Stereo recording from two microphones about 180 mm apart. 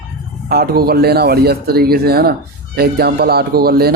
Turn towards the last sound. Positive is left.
turn(degrees=-60)  # may be behind; listen again after turning